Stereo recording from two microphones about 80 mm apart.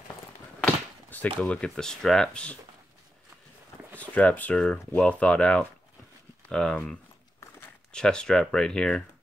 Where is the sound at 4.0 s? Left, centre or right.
Centre.